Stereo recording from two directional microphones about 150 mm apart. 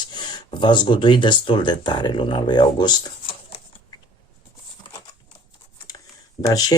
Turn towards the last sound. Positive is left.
turn(degrees=25)  # may be behind; listen again after turning